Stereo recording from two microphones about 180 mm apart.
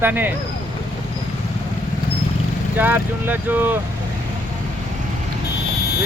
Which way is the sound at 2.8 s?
10° right (ahead or behind).